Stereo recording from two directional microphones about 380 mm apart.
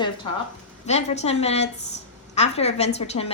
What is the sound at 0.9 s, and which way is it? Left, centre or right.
A woman's voice, centre.